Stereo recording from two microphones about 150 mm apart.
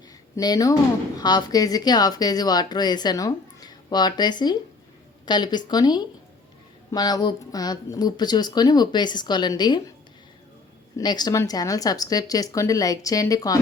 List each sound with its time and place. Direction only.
0.3 s a woman's voice: 25° left (ahead or behind)
10.9 s a woman's voice: 30° left (ahead or behind)